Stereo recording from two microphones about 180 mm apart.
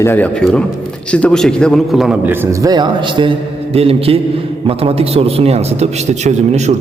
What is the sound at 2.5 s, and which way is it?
A man's voice, 20° right (ahead or behind).